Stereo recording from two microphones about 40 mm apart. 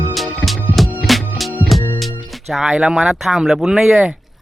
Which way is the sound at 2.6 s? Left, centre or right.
Right.